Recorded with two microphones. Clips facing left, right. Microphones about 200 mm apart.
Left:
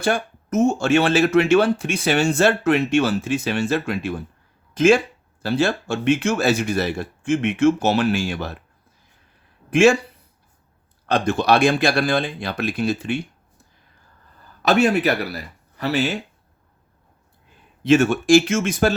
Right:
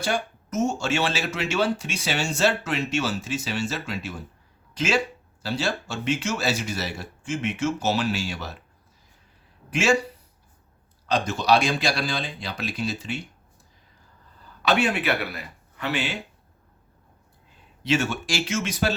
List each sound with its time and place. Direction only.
0.0 s speech: 55° left (ahead or behind)
9.6 s speech: 55° left (ahead or behind)
11.0 s speech: 55° left (ahead or behind)
14.6 s speech: 45° left (ahead or behind)
17.8 s speech: 50° left (ahead or behind)